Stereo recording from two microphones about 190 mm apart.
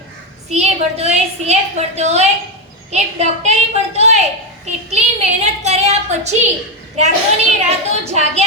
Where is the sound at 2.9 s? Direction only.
35° right (ahead or behind).